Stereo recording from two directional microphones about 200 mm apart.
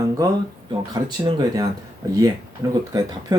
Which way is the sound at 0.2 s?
15° right (ahead or behind).